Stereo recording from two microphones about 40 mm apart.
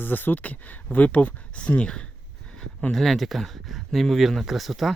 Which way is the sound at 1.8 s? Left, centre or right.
Left.